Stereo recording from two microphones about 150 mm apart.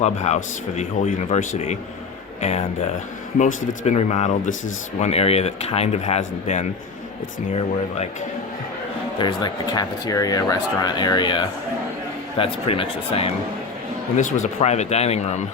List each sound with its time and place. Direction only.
0.0 s speech: 50° left (ahead or behind)
9.1 s speech: 30° left (ahead or behind)
14.2 s speech: 55° left (ahead or behind)